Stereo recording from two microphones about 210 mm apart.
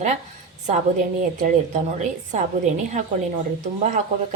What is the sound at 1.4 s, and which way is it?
Speech, 35° right (ahead or behind).